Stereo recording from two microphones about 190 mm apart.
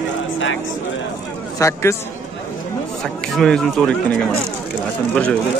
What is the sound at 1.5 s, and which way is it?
Speech, 15° left (ahead or behind).